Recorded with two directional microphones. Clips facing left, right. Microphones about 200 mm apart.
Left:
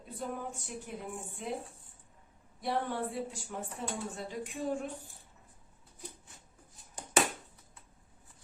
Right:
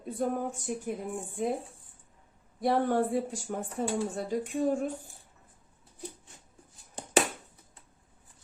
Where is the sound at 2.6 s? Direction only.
45° right (ahead or behind).